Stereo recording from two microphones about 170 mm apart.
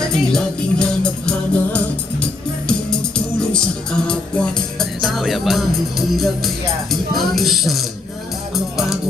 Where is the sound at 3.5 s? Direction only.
5° left (ahead or behind).